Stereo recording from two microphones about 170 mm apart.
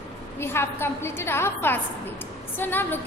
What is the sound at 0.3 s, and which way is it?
A woman's voice, 15° left (ahead or behind).